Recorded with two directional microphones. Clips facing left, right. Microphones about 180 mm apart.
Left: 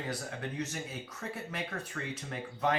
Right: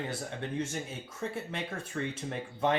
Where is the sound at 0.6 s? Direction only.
25° right (ahead or behind).